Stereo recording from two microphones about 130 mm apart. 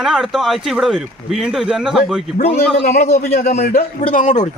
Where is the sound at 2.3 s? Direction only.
55° left (ahead or behind).